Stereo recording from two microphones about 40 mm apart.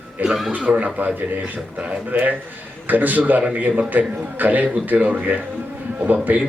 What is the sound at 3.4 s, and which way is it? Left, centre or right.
A man's voice, right.